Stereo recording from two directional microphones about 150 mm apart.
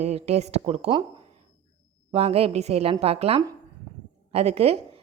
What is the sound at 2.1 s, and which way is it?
A woman's voice, 40° right (ahead or behind).